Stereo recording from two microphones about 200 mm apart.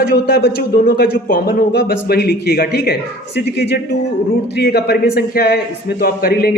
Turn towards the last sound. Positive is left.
turn(degrees=50)  # may be behind; listen again after turning